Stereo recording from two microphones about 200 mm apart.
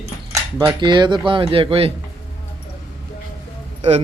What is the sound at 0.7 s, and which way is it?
Speech, 20° right (ahead or behind).